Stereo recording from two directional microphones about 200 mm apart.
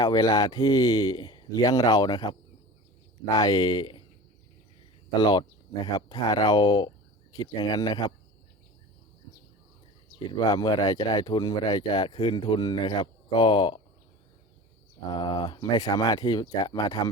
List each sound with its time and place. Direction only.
0.0 s speech: 20° left (ahead or behind)
5.2 s speech: 20° left (ahead or behind)
10.3 s speech: 20° left (ahead or behind)
15.1 s speech: 20° left (ahead or behind)